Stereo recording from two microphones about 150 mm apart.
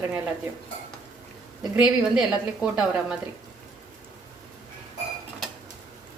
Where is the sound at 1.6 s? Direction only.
5° right (ahead or behind).